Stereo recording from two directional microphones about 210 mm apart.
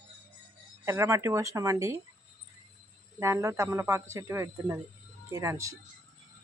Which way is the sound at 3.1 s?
15° right (ahead or behind).